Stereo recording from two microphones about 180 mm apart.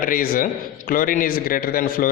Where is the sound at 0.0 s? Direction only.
50° left (ahead or behind).